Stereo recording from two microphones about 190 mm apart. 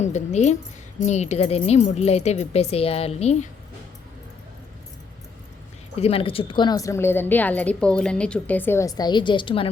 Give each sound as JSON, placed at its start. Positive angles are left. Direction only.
{"t": 0.0, "sound": "speech", "side_deg": 40}
{"t": 6.0, "sound": "a woman's voice", "side_deg": 30}